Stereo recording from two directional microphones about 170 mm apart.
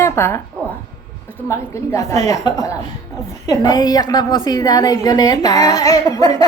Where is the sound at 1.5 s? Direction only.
15° left (ahead or behind).